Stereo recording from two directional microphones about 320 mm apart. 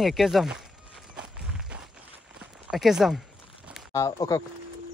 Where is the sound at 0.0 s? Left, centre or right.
Centre.